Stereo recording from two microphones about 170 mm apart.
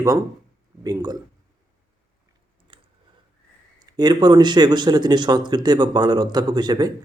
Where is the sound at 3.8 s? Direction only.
25° right (ahead or behind).